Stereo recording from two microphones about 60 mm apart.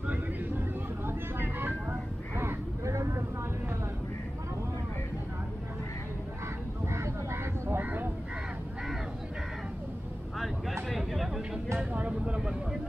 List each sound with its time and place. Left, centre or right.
1.0 s vehicle: right
2.8 s vehicle: right
6.9 s a sound: right
10.4 s vehicle: centre
11.8 s vehicle: right